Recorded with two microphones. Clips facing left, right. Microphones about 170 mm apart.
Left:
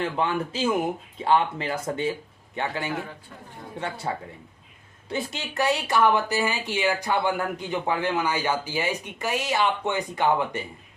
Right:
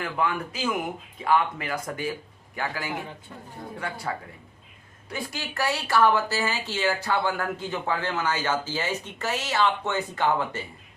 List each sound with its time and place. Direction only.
0.0 s speech: 25° left (ahead or behind)